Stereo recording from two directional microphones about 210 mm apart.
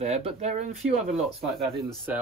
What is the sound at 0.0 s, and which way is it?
Speech, 30° right (ahead or behind).